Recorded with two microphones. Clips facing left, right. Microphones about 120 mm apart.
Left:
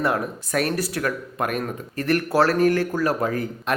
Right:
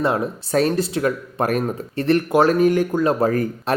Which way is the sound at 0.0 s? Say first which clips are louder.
Right 3 dB; 25° right (ahead or behind).